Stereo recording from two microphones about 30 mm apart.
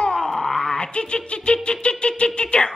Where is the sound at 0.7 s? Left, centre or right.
Left.